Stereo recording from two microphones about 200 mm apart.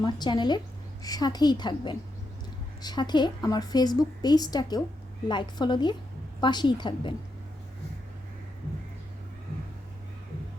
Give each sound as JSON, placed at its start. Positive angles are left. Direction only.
{"t": 0.0, "sound": "a woman's voice", "side_deg": 20}